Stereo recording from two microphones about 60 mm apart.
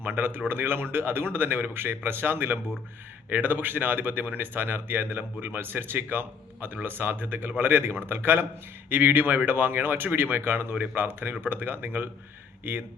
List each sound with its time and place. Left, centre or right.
0.0 s speech: right